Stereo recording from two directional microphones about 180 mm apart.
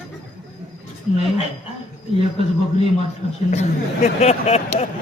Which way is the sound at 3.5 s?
40° left (ahead or behind).